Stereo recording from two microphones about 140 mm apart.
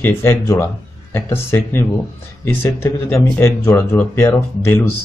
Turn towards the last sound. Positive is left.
turn(degrees=20)  # may be behind; listen again after turning